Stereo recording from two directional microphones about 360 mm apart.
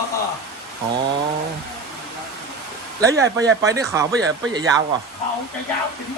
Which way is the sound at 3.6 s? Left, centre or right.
Centre.